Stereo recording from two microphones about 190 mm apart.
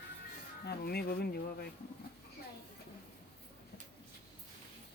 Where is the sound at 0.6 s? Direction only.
55° left (ahead or behind).